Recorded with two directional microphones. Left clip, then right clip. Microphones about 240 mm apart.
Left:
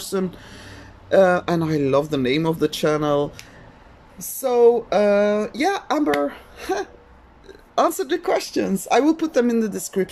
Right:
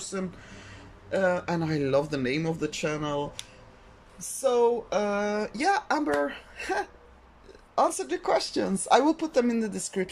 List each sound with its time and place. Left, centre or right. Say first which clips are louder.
0.0 s a woman's voice: left 9 dB; centre